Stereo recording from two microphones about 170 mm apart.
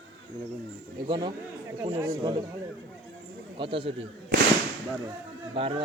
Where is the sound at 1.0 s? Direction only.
25° right (ahead or behind).